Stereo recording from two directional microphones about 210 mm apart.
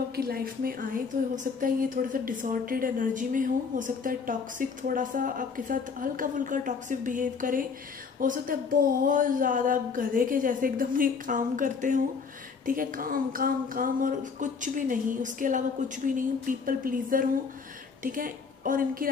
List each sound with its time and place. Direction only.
0.1 s a woman's voice: 45° right (ahead or behind)